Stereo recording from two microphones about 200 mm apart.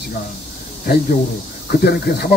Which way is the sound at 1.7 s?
50° left (ahead or behind).